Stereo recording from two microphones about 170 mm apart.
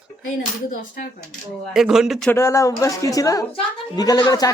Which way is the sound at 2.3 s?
15° left (ahead or behind).